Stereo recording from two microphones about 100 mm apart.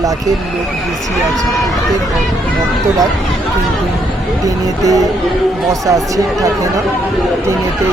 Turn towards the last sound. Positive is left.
turn(degrees=-35)  # may be behind; listen again after turning